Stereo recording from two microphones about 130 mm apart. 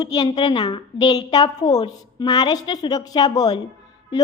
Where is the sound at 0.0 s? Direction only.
30° left (ahead or behind).